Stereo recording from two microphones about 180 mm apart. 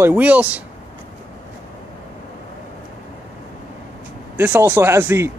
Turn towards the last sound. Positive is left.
turn(degrees=-15)  # may be behind; listen again after turning